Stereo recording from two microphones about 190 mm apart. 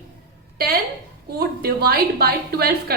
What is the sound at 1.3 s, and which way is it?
A woman's voice, 55° right (ahead or behind).